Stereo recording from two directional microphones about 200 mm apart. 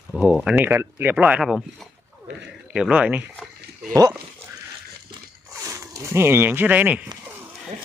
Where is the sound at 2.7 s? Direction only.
5° right (ahead or behind).